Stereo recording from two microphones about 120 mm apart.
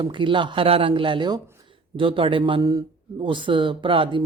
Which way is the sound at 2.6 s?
30° right (ahead or behind).